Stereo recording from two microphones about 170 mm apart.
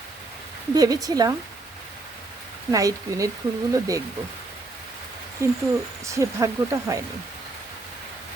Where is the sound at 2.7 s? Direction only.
20° right (ahead or behind).